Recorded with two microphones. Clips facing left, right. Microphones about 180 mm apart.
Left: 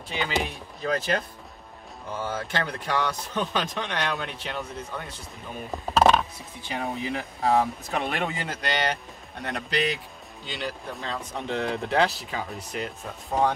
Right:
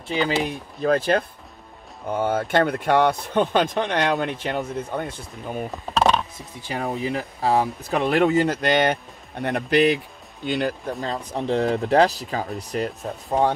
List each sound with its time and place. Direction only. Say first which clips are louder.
0.5 s speech: right 7 dB; 55° right (ahead or behind)
5.9 s a sound: even; 5° left (ahead or behind)
6.7 s speech: right 4 dB; 40° right (ahead or behind); by 10.7 s 55° right (ahead or behind)
11.0 s speech: right 6 dB; 35° right (ahead or behind)